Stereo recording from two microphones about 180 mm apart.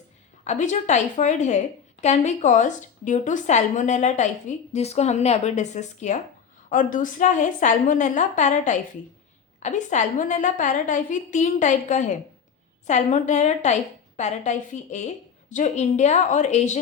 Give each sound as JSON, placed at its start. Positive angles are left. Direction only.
{"t": 0.4, "sound": "a woman's voice", "side_deg": 40}